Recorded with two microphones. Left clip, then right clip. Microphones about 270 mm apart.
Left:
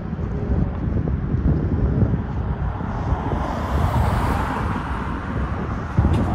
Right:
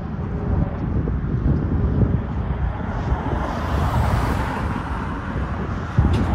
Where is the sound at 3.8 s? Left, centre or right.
Left.